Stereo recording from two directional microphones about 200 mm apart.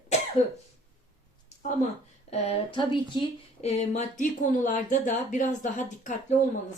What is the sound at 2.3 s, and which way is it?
Speech, 25° left (ahead or behind).